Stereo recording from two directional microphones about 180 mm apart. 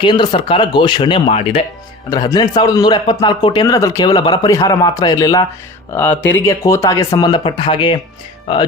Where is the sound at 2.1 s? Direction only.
20° left (ahead or behind).